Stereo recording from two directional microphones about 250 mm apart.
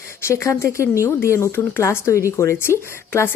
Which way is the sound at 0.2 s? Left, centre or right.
Centre.